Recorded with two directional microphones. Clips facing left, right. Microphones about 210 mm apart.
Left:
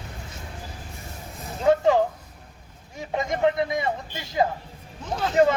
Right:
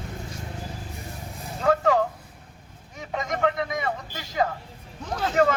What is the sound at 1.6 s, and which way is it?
Speech, 25° left (ahead or behind).